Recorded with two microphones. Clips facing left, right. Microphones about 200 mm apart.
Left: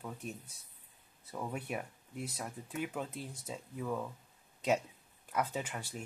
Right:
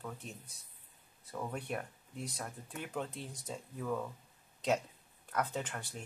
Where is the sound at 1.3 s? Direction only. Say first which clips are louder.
Even; 5° left (ahead or behind).